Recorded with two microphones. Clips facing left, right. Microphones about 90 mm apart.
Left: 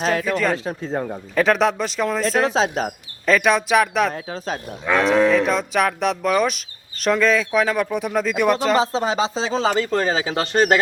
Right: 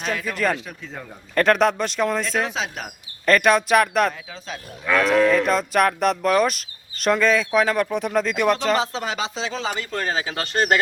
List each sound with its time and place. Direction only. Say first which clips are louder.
0.0 s speech: left 6 dB; 40° left (ahead or behind)
0.3 s speech: left 2 dB; centre (ahead or behind)
0.5 s speech: left 8 dB; 35° left (ahead or behind)
1.4 s speech: even; centre (ahead or behind)
2.2 s speech: left 6 dB; 40° left (ahead or behind)
3.2 s speech: even; centre (ahead or behind)
4.1 s speech: left 8 dB; 45° left (ahead or behind)
4.9 s speech: left 1 dB; 20° left (ahead or behind)
5.3 s speech: left 1 dB; centre (ahead or behind)
8.7 s speech: left 4 dB; 35° left (ahead or behind)